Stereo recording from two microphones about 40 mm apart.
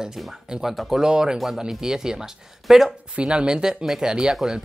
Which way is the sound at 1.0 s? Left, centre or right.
Centre.